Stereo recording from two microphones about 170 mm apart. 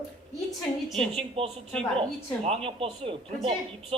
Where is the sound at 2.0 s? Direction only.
35° right (ahead or behind).